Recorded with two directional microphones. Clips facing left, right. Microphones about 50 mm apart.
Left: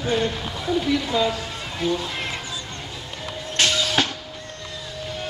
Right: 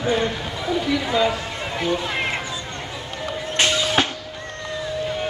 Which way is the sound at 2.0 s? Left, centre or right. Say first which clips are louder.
Right 5 dB; right.